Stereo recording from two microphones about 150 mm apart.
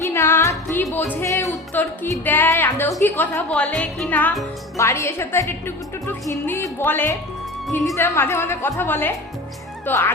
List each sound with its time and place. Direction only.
0.1 s music: 15° left (ahead or behind)
1.7 s a woman's voice: 10° left (ahead or behind)
4.8 s a woman's voice: 20° left (ahead or behind)